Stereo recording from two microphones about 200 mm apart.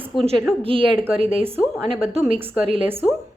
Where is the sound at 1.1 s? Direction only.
30° right (ahead or behind).